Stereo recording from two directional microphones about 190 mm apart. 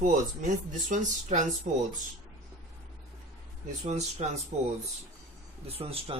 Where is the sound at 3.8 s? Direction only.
35° right (ahead or behind).